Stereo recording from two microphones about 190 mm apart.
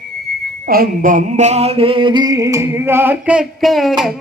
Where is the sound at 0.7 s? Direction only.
50° right (ahead or behind).